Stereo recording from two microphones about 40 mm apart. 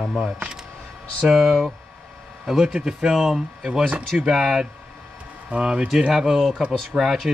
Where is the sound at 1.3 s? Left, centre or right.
Centre.